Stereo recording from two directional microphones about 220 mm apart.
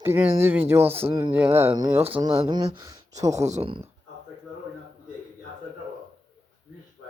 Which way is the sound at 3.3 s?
30° right (ahead or behind).